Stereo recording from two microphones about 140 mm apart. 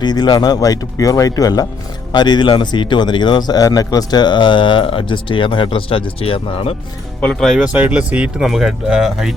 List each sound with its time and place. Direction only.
0.0 s a man's voice: 30° left (ahead or behind)
7.2 s speech: 5° left (ahead or behind)